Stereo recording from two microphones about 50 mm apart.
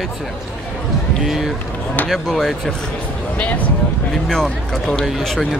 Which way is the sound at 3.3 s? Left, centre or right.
Left.